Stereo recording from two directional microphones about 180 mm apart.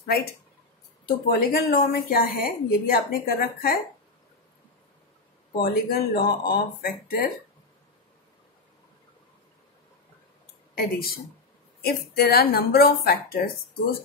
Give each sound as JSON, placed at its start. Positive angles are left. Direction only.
{"t": 0.0, "sound": "a woman's voice", "side_deg": 60}
{"t": 5.6, "sound": "a woman's voice", "side_deg": 55}
{"t": 10.7, "sound": "speech", "side_deg": 55}
{"t": 12.2, "sound": "a woman's voice", "side_deg": 60}